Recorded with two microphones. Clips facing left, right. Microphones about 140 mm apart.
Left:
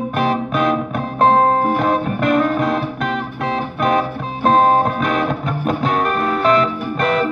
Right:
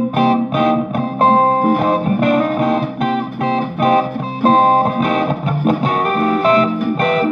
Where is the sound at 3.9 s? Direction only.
35° right (ahead or behind).